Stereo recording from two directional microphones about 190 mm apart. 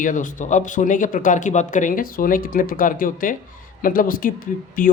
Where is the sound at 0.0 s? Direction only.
45° left (ahead or behind).